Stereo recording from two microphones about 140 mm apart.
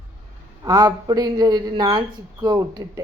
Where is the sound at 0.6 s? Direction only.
30° right (ahead or behind).